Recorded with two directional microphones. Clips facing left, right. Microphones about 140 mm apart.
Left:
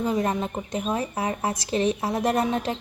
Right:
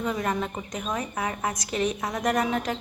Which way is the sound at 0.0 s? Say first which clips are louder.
Left 3 dB; 30° left (ahead or behind).